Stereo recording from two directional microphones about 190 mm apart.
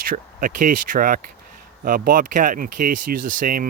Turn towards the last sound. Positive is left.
turn(degrees=-45)  # may be behind; listen again after turning